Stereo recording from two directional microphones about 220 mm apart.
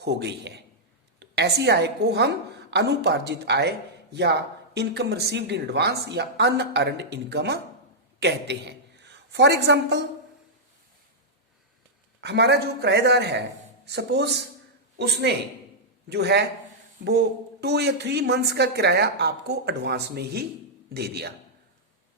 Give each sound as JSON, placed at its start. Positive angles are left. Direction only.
{"t": 0.0, "sound": "a woman's voice", "side_deg": -50}
{"t": 12.2, "sound": "a woman's voice", "side_deg": -50}